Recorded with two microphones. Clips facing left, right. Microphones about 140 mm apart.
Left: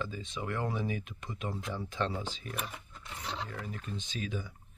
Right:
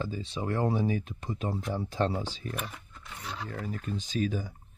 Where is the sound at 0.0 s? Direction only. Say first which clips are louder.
Right 4 dB; 35° right (ahead or behind).